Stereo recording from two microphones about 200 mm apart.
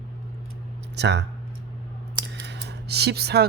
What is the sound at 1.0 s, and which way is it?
Speech, 60° right (ahead or behind).